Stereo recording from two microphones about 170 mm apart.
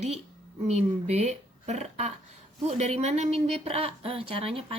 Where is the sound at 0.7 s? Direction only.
40° right (ahead or behind).